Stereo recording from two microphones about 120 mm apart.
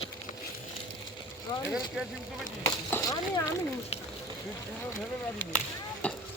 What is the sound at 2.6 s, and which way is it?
Speech, 25° left (ahead or behind).